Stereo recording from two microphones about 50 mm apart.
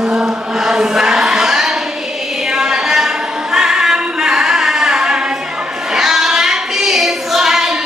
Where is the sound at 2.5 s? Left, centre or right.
Centre.